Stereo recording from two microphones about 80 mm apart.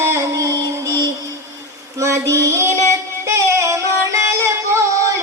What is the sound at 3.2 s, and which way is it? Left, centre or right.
Music, right.